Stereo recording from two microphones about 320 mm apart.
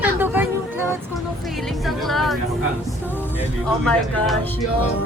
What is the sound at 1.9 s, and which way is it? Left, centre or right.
Vehicle, centre.